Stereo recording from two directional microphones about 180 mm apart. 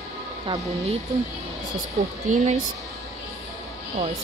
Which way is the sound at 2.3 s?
40° right (ahead or behind).